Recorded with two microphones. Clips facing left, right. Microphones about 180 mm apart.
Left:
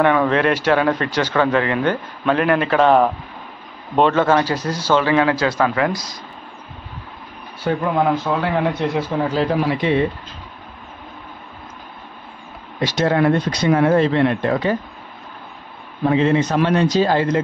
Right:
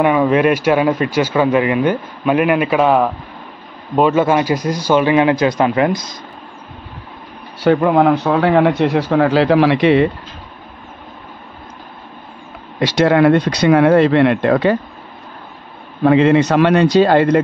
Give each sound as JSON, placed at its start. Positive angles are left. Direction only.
{"t": 0.0, "sound": "speech", "side_deg": -10}
{"t": 7.6, "sound": "speech", "side_deg": -65}
{"t": 12.7, "sound": "speech", "side_deg": -75}
{"t": 16.0, "sound": "speech", "side_deg": -75}